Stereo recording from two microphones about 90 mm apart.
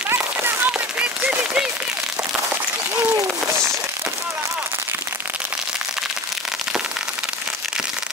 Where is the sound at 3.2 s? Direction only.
30° right (ahead or behind).